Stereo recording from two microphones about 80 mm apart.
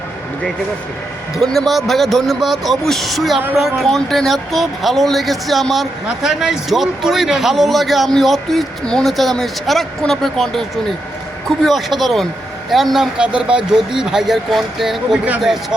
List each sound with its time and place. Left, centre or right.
1.4 s speech: centre